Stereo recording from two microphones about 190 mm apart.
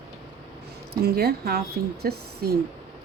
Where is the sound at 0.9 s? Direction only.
55° right (ahead or behind).